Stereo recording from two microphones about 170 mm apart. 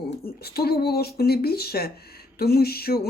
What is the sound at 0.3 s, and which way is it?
Speech, 65° left (ahead or behind).